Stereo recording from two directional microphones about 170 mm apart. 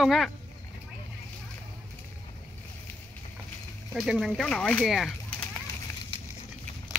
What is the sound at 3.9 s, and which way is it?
Speech, centre (ahead or behind).